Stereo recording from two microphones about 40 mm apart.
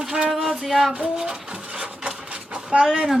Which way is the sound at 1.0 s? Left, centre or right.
Centre.